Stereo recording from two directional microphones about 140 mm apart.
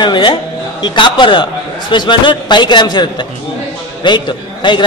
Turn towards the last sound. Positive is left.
turn(degrees=35)  # may be behind; listen again after turning